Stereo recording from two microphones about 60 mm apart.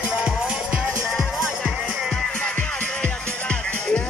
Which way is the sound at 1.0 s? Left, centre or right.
Centre.